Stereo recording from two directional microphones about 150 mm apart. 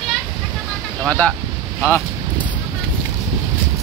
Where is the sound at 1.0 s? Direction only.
5° left (ahead or behind).